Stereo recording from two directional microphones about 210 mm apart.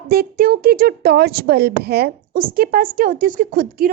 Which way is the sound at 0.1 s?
45° right (ahead or behind).